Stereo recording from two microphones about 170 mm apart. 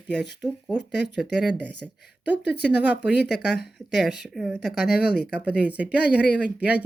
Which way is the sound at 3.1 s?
75° left (ahead or behind).